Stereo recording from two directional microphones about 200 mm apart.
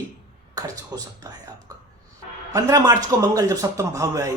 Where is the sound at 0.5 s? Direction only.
20° right (ahead or behind).